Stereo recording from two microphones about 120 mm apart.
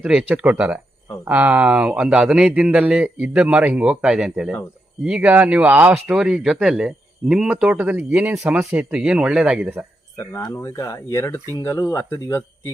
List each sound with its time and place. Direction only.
0.0 s speech: 10° right (ahead or behind)
8.8 s speech: 5° right (ahead or behind)
10.4 s speech: 30° left (ahead or behind)